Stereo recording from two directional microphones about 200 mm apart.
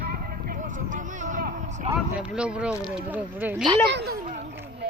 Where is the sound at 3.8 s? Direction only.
50° right (ahead or behind).